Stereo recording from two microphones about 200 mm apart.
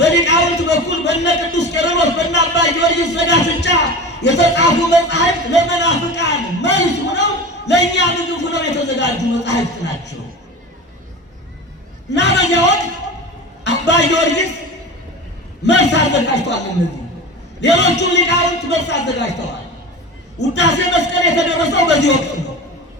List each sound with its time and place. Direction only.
0.0 s a sound: 60° left (ahead or behind)
6.1 s speech: 60° left (ahead or behind)
12.1 s a man's voice: 60° left (ahead or behind)
15.6 s a man's voice: 60° left (ahead or behind)